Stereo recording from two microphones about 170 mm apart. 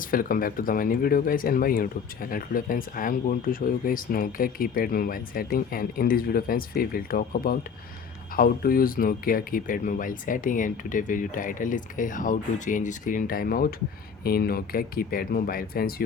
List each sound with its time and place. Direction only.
0.0 s speech: 55° left (ahead or behind)